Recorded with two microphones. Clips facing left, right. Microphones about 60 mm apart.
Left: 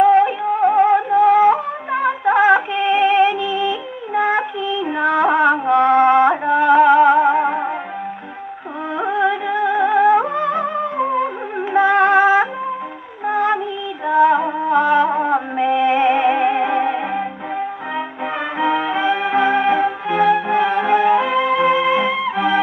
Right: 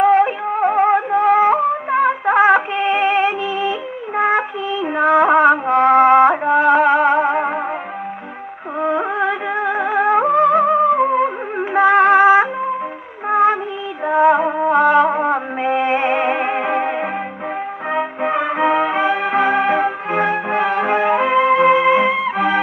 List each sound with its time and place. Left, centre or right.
0.0 s music: right
8.8 s music: right